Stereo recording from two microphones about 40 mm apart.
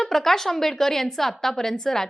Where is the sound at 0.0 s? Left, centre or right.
Centre.